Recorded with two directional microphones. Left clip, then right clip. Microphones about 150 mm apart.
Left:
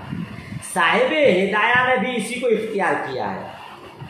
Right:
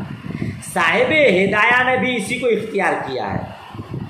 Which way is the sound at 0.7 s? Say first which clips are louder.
Right 2 dB; 25° right (ahead or behind).